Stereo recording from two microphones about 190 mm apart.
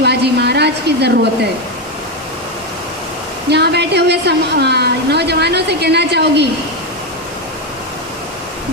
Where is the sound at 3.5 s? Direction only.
60° right (ahead or behind).